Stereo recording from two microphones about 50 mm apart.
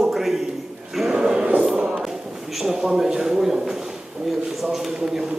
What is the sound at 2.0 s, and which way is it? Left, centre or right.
A man's voice, centre.